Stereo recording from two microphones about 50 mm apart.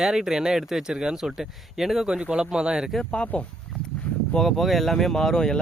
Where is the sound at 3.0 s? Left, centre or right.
Left.